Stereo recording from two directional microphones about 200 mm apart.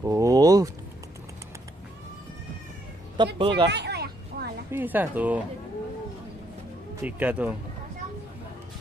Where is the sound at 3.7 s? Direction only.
55° right (ahead or behind).